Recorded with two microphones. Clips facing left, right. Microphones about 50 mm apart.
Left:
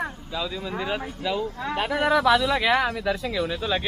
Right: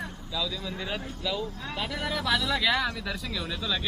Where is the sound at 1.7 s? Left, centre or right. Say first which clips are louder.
Left 9 dB; left.